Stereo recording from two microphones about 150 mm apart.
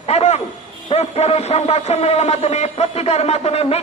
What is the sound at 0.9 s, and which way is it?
A man's voice, 45° left (ahead or behind).